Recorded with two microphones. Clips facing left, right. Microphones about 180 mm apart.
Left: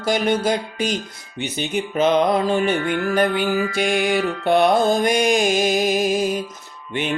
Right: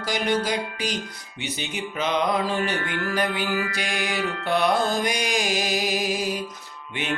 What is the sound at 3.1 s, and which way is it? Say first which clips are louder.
Music: left 5 dB; 55° left (ahead or behind).